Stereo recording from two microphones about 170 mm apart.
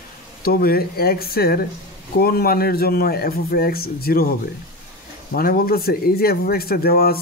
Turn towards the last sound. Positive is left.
turn(degrees=65)  # may be behind; listen again after turning